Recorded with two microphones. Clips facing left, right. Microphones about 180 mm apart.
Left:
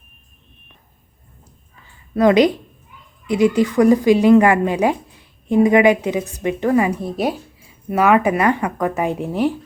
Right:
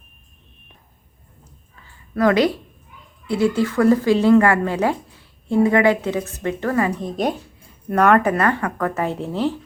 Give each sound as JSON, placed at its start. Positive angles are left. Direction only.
{"t": 2.1, "sound": "speech", "side_deg": 20}